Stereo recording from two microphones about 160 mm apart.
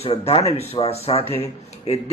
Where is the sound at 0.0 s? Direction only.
40° left (ahead or behind).